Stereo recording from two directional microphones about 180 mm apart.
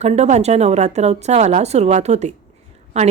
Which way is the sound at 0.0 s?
35° right (ahead or behind).